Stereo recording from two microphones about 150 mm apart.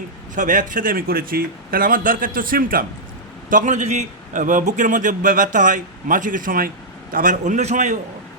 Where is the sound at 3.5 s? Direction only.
55° right (ahead or behind).